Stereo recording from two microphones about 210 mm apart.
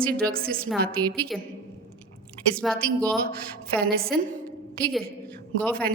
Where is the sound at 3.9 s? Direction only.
45° right (ahead or behind).